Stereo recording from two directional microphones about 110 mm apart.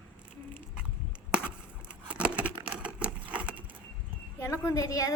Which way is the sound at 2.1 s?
10° right (ahead or behind).